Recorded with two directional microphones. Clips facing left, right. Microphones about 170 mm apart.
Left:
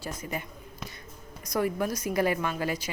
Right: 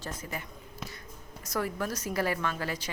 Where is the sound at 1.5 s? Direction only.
15° left (ahead or behind).